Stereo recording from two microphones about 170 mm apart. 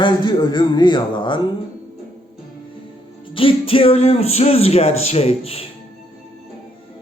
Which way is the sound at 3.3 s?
30° left (ahead or behind).